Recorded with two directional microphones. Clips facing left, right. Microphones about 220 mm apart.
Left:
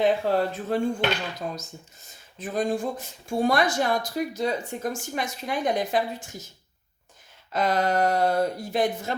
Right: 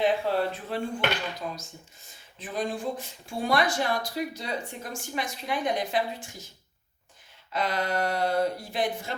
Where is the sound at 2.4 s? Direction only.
45° left (ahead or behind).